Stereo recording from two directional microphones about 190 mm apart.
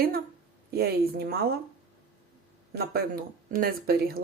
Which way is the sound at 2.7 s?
55° right (ahead or behind).